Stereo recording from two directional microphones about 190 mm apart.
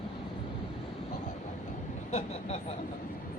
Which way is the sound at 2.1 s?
35° left (ahead or behind).